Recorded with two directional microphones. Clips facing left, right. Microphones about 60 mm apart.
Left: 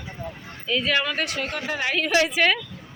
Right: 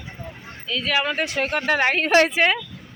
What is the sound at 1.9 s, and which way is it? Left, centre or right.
Speech, right.